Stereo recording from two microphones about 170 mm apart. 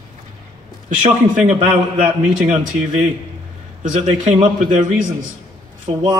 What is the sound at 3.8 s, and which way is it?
A man's voice, 45° right (ahead or behind).